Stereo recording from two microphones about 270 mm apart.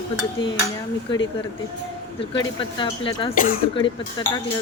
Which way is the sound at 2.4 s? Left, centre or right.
Centre.